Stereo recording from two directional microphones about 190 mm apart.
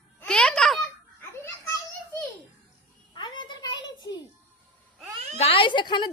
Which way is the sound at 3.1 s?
25° left (ahead or behind).